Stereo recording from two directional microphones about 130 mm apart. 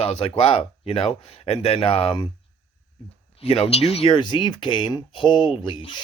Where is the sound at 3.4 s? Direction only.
50° left (ahead or behind).